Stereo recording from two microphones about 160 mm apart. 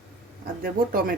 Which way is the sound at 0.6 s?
65° right (ahead or behind).